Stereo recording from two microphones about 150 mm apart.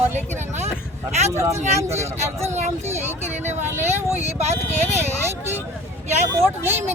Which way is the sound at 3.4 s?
50° right (ahead or behind).